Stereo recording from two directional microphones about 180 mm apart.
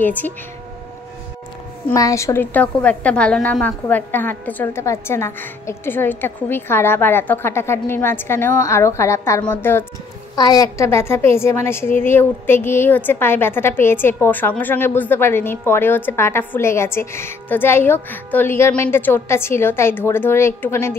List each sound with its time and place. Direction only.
0.0 s a woman's voice: 10° left (ahead or behind)
1.9 s a woman's voice: 15° left (ahead or behind)